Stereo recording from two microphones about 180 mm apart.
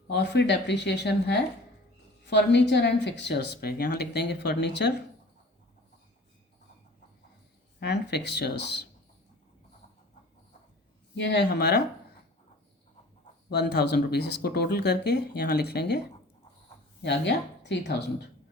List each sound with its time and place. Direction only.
0.1 s speech: 70° left (ahead or behind)
7.8 s speech: 70° left (ahead or behind)
11.1 s speech: 70° left (ahead or behind)
13.5 s speech: 65° left (ahead or behind)
17.0 s speech: 75° left (ahead or behind)